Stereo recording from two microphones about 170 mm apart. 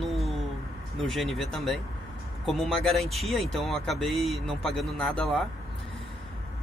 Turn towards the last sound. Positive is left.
turn(degrees=5)  # may be behind; listen again after turning